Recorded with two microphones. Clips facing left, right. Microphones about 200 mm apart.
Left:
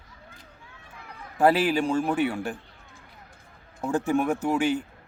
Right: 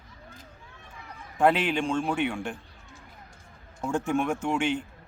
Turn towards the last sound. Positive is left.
turn(degrees=5)  # may be behind; listen again after turning